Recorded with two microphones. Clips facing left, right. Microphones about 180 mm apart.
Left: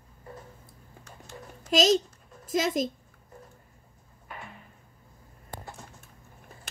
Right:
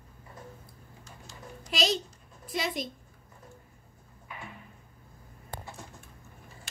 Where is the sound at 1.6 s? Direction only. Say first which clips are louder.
Left 7 dB; 45° left (ahead or behind).